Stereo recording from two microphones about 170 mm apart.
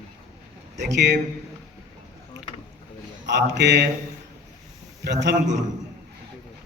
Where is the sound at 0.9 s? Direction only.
90° right.